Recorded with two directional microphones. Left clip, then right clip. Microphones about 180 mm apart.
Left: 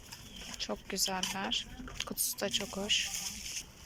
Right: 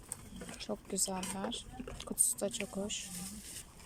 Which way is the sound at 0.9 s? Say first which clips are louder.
Left 6 dB; 20° right (ahead or behind).